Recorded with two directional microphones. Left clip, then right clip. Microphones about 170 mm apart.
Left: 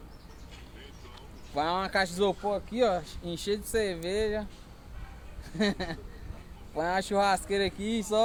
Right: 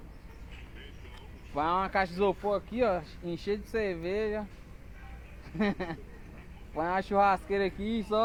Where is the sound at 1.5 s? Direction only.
55° left (ahead or behind).